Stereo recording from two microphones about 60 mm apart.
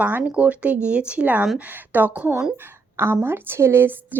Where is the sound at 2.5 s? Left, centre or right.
Right.